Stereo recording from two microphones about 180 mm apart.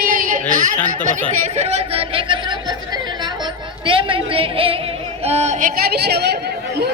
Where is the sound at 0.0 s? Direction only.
50° right (ahead or behind).